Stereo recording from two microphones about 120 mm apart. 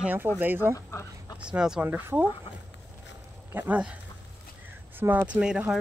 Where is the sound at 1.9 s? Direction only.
15° right (ahead or behind).